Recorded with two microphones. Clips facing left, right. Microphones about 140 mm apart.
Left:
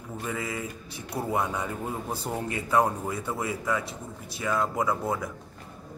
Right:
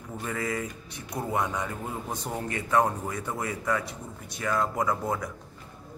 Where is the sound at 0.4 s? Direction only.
25° left (ahead or behind).